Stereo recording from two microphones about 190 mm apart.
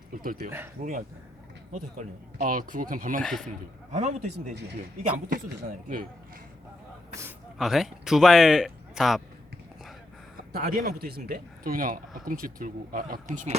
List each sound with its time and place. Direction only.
0.2 s speech: 45° right (ahead or behind)
3.2 s speech: centre (ahead or behind)
3.9 s a man's voice: 40° right (ahead or behind)
7.6 s speech: centre (ahead or behind)
10.5 s speech: 50° right (ahead or behind)